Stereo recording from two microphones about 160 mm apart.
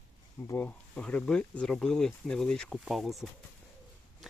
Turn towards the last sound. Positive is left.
turn(degrees=0)  # may be behind; listen again after turning